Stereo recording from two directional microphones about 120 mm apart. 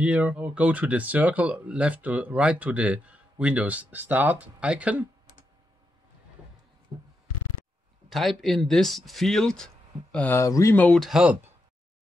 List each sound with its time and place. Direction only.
0.0 s speech: 10° right (ahead or behind)
6.9 s a sound: 50° right (ahead or behind)
8.1 s speech: centre (ahead or behind)
10.4 s speech: 25° left (ahead or behind)
10.8 s speech: 5° left (ahead or behind)